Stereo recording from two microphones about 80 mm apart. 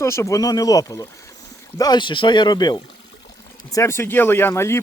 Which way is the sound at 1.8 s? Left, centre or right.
Left.